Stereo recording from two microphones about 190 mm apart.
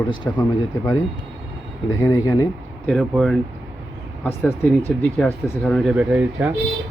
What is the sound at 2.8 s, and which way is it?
Speech, 5° left (ahead or behind).